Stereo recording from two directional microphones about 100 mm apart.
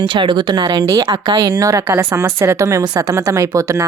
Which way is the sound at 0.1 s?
50° right (ahead or behind).